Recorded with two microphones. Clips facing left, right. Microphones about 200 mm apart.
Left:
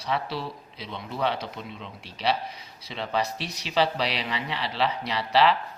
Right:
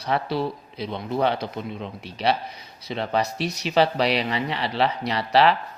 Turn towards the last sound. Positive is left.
turn(degrees=-50)  # may be behind; listen again after turning